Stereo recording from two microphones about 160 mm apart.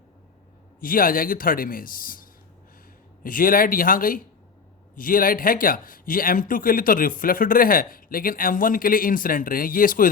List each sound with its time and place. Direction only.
0.8 s speech: 60° left (ahead or behind)
3.2 s speech: 60° left (ahead or behind)